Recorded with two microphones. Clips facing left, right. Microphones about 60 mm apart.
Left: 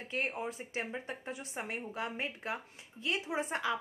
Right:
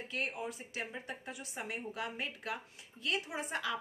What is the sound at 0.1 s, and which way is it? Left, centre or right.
Speech, left.